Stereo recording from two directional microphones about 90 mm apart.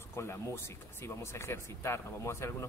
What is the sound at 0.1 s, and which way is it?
Speech, 30° left (ahead or behind).